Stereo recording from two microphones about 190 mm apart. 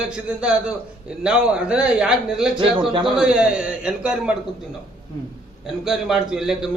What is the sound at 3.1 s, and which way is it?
A man's voice, 5° right (ahead or behind).